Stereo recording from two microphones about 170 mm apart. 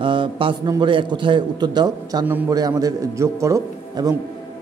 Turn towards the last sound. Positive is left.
turn(degrees=-20)  # may be behind; listen again after turning